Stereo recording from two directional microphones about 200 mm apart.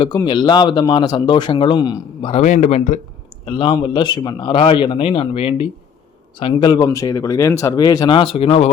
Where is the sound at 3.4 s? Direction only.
25° left (ahead or behind).